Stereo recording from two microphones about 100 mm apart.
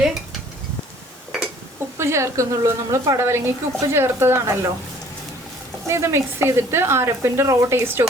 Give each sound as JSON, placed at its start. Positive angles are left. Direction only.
{"t": 2.0, "sound": "speech", "side_deg": -30}
{"t": 5.9, "sound": "speech", "side_deg": -25}